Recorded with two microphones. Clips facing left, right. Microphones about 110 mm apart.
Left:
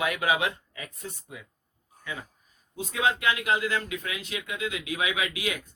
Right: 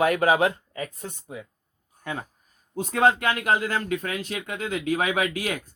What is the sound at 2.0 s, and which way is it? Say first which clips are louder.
A man's voice: right 5 dB; 50° right (ahead or behind).